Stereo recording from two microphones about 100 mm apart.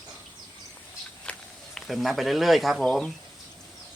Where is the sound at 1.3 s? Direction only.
5° left (ahead or behind).